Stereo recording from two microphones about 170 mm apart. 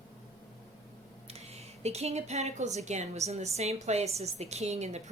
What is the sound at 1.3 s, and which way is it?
A woman's voice, 40° right (ahead or behind).